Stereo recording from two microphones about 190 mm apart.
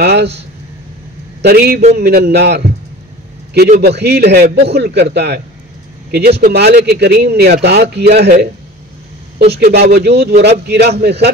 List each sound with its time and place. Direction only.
0.0 s speech: 60° right (ahead or behind)
1.4 s speech: 55° right (ahead or behind)
3.8 s speech: 60° right (ahead or behind)
9.5 s speech: 60° right (ahead or behind)